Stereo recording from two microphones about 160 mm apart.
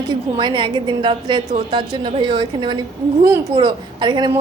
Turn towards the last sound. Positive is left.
turn(degrees=-25)  # may be behind; listen again after turning